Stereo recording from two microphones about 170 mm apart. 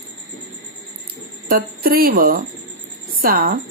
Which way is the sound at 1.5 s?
60° right (ahead or behind).